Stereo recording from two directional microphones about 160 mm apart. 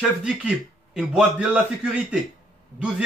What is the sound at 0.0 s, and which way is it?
A man's voice, 5° right (ahead or behind).